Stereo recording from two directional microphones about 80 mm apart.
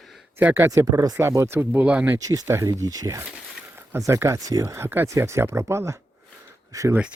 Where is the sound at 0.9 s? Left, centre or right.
Right.